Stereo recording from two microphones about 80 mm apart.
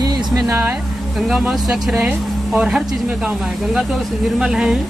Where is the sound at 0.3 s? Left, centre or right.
Right.